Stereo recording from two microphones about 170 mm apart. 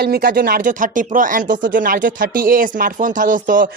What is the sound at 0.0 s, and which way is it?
Speech, 65° right (ahead or behind).